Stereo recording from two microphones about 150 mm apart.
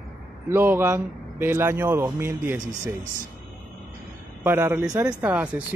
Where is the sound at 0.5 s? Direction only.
15° right (ahead or behind).